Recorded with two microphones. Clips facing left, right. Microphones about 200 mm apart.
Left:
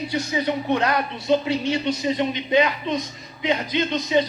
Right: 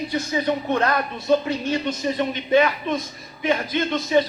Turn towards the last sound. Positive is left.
turn(degrees=20)  # may be behind; listen again after turning